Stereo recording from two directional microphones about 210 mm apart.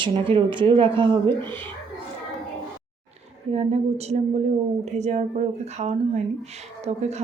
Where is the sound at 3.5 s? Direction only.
30° right (ahead or behind).